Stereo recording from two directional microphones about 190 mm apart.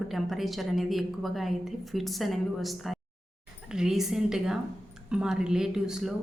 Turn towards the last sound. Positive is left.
turn(degrees=0)  # may be behind; listen again after turning